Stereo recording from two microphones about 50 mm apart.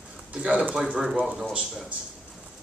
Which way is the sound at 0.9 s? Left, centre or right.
Centre.